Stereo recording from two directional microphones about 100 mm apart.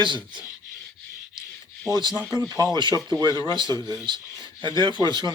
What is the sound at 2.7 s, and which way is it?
A man's voice, 45° right (ahead or behind).